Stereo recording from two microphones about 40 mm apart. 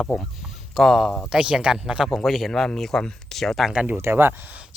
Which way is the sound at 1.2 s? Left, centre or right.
Centre.